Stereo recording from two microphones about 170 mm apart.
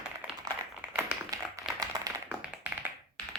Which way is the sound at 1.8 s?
20° right (ahead or behind).